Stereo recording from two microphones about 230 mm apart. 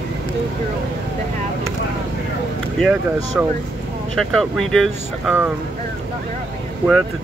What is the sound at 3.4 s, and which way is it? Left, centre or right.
Speech, centre.